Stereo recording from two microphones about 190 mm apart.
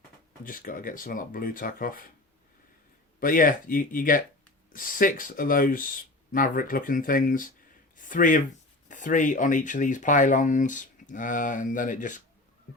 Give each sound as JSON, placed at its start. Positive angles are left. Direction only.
{"t": 0.4, "sound": "speech", "side_deg": 45}
{"t": 3.2, "sound": "speech", "side_deg": 45}